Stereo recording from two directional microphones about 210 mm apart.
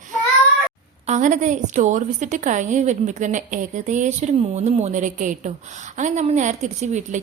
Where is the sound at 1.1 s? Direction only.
35° right (ahead or behind).